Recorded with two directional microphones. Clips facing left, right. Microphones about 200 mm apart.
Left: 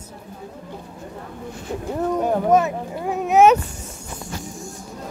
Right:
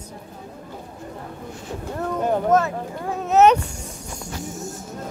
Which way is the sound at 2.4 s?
15° left (ahead or behind).